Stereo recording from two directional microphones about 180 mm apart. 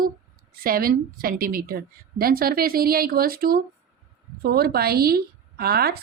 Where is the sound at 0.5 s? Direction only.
55° right (ahead or behind).